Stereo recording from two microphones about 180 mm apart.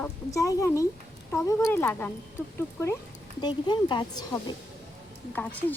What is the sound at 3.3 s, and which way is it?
A woman's voice, 25° left (ahead or behind).